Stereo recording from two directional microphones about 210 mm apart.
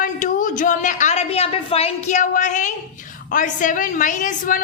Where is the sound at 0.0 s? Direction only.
40° left (ahead or behind).